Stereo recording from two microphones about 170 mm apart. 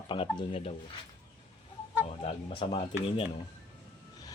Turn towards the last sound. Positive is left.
turn(degrees=35)  # may be behind; listen again after turning